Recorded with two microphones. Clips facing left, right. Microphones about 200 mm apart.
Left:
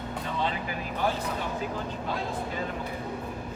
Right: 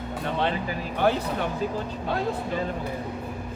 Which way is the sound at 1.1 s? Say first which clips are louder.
Right 8 dB; 65° right (ahead or behind).